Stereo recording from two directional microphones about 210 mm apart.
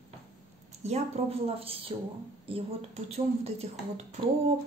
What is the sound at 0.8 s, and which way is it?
A woman's voice, 30° right (ahead or behind).